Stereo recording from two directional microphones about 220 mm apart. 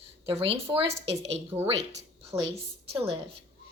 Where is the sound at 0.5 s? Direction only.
25° right (ahead or behind).